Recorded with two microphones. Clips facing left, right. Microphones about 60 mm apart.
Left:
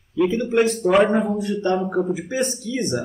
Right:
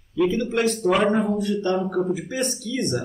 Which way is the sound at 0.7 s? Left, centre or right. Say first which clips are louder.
Left 1 dB; centre.